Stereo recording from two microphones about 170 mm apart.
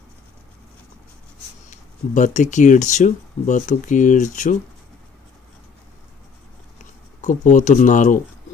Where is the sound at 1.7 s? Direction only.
45° left (ahead or behind).